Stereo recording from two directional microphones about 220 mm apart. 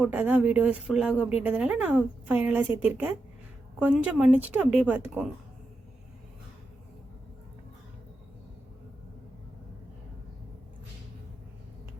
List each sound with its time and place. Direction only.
0.0 s a woman's voice: 5° right (ahead or behind)